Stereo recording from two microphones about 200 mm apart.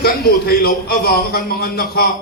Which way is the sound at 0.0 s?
50° left (ahead or behind).